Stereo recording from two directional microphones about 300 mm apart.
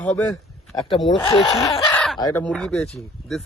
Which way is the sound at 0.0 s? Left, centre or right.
Centre.